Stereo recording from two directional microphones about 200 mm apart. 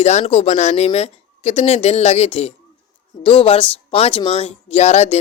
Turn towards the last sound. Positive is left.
turn(degrees=35)  # may be behind; listen again after turning